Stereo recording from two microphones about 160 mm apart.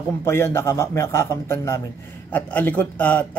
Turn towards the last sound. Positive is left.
turn(degrees=10)  # may be behind; listen again after turning